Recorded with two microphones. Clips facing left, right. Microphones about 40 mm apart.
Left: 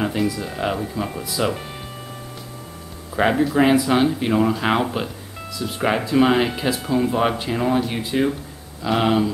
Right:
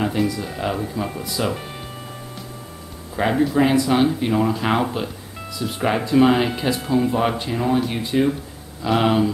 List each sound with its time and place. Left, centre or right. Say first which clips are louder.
0.0 s speech: right 1 dB; centre
3.2 s speech: left 1 dB; centre